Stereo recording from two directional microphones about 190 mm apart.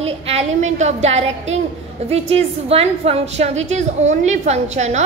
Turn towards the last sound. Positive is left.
turn(degrees=-35)  # may be behind; listen again after turning